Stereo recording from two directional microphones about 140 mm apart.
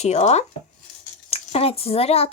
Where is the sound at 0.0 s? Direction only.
50° left (ahead or behind).